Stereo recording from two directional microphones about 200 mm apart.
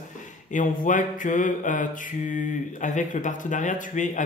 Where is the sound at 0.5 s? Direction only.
40° left (ahead or behind).